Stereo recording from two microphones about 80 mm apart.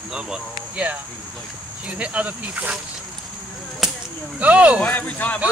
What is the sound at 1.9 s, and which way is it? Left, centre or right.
Speech, centre.